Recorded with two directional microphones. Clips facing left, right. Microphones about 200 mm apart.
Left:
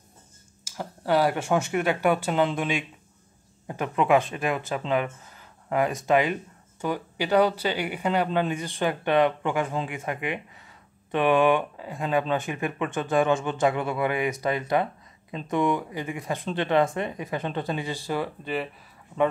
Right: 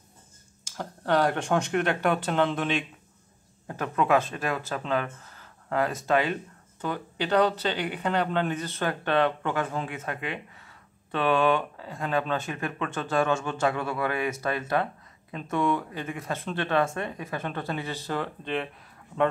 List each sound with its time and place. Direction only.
0.7 s speech: 5° left (ahead or behind)